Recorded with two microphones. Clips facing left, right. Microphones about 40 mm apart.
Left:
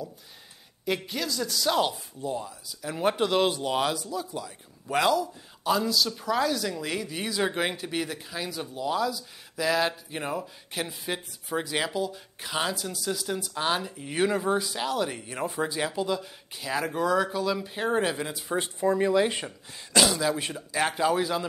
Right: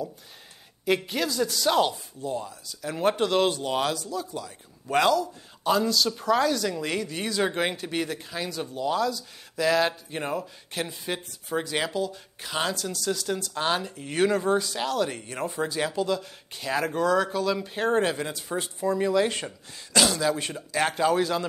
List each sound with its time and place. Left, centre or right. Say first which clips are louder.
0.8 s a woman's voice: right 4 dB; centre
1.5 s speech: even; centre
13.6 s speech: even; centre
17.6 s speech: right 2 dB; centre
18.6 s speech: left 2 dB; left
19.0 s speech: even; centre